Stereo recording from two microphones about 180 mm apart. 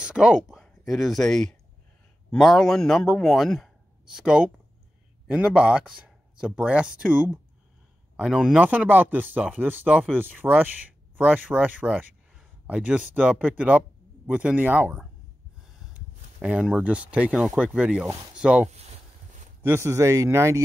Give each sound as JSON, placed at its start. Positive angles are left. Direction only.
{"t": 0.0, "sound": "a man's voice", "side_deg": -5}
{"t": 18.7, "sound": "a sound", "side_deg": -35}
{"t": 19.6, "sound": "speech", "side_deg": -15}